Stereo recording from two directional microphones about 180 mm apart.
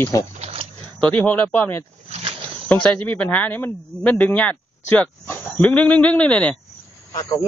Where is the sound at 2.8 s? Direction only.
5° left (ahead or behind).